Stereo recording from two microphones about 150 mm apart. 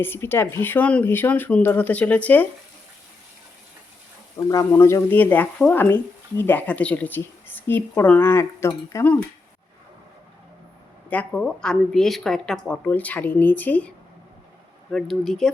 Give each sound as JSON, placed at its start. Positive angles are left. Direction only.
{"t": 0.0, "sound": "speech", "side_deg": 15}
{"t": 4.4, "sound": "speech", "side_deg": 20}
{"t": 11.1, "sound": "speech", "side_deg": 10}
{"t": 14.9, "sound": "speech", "side_deg": 0}